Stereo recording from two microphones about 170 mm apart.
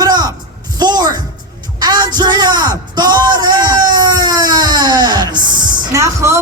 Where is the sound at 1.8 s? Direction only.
25° right (ahead or behind).